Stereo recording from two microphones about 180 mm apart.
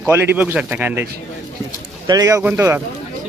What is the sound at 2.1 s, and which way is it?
Speech, 20° right (ahead or behind).